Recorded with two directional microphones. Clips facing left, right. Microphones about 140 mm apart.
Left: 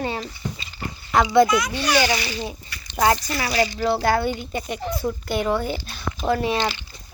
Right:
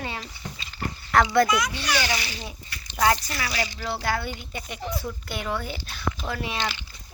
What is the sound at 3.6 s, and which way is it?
Speech, 45° left (ahead or behind).